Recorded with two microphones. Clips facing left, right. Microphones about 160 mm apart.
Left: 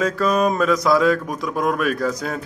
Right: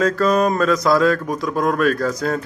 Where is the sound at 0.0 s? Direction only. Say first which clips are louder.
Right 2 dB; 10° left (ahead or behind).